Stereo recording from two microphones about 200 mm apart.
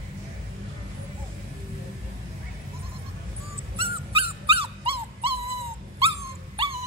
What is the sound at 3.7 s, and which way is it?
Dog, 30° right (ahead or behind).